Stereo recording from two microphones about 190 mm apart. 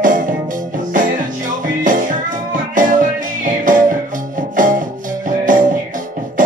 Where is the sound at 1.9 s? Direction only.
45° right (ahead or behind).